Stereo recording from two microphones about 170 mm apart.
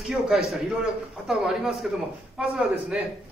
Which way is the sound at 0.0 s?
Centre (ahead or behind).